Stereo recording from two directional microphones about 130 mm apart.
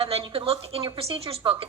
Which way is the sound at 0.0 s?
45° right (ahead or behind).